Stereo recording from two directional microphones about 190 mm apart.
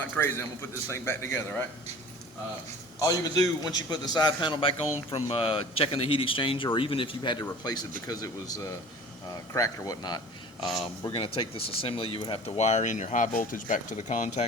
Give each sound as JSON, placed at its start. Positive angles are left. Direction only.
{"t": 0.0, "sound": "speech", "side_deg": 10}
{"t": 3.1, "sound": "a man's voice", "side_deg": 20}
{"t": 10.6, "sound": "speech", "side_deg": 0}
{"t": 11.0, "sound": "a man's voice", "side_deg": 30}